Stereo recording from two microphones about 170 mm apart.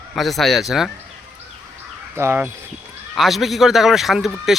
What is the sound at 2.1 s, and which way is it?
Speech, 15° right (ahead or behind).